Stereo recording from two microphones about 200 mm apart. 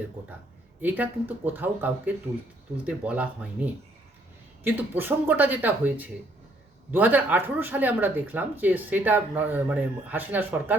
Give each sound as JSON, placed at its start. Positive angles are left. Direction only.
{"t": 0.8, "sound": "speech", "side_deg": -10}